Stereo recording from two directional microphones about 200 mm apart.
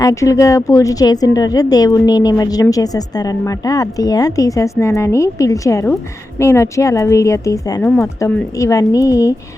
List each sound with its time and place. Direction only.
0.0 s a woman's voice: 15° left (ahead or behind)